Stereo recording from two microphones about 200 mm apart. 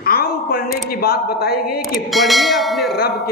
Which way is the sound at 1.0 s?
50° left (ahead or behind).